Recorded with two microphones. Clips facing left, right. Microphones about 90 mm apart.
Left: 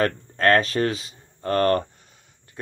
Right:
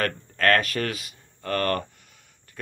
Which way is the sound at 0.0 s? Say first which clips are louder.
Left 3 dB; 30° left (ahead or behind).